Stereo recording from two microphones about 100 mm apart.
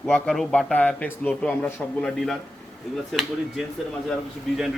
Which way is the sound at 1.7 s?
5° left (ahead or behind).